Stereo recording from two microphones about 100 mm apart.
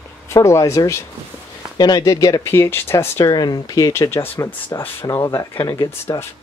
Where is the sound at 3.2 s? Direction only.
40° left (ahead or behind).